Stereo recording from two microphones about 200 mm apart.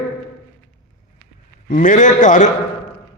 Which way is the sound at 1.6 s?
40° left (ahead or behind).